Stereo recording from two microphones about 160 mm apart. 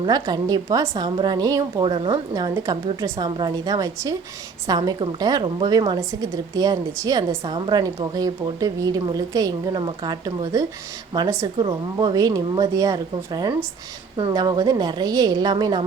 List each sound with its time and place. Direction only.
0.0 s a woman's voice: 25° right (ahead or behind)